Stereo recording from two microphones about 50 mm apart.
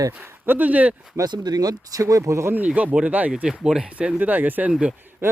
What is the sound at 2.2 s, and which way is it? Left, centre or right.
Speech, right.